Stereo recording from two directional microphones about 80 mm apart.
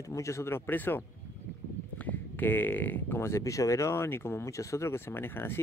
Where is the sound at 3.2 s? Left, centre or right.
Left.